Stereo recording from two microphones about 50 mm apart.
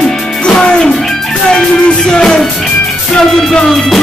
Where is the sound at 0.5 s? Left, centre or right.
Centre.